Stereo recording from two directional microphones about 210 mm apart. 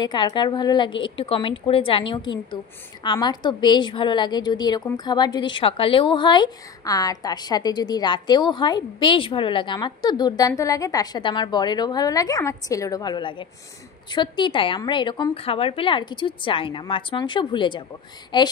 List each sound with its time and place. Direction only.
0.0 s a woman's voice: 20° left (ahead or behind)